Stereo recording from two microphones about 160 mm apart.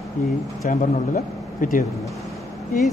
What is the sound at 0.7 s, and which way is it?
A man's voice, 55° left (ahead or behind).